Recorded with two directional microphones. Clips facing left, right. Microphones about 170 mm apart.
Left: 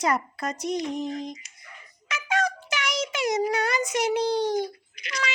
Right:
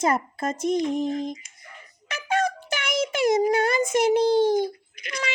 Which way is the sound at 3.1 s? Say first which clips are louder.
Right 5 dB; 50° right (ahead or behind).